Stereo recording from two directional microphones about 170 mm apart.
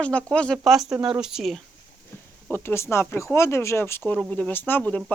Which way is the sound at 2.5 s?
15° left (ahead or behind).